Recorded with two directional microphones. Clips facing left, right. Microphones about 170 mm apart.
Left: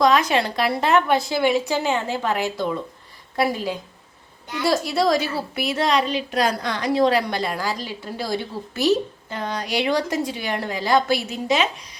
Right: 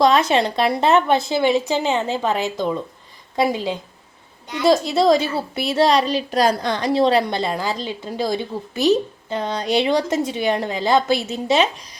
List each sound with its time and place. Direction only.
0.0 s a woman's voice: 25° right (ahead or behind)